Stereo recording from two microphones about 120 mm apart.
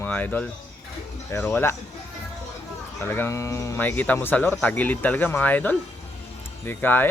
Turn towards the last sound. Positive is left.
turn(degrees=15)  # may be behind; listen again after turning